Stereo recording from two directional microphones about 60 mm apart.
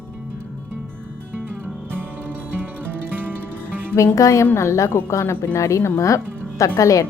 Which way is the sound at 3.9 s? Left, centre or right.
Left.